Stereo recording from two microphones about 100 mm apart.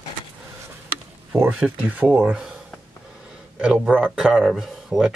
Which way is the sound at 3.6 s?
10° right (ahead or behind).